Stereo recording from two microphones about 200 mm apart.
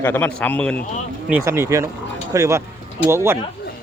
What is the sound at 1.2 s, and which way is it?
Speech, 10° right (ahead or behind).